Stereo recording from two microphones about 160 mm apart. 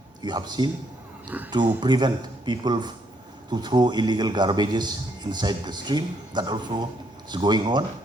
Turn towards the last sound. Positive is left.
turn(degrees=-30)  # may be behind; listen again after turning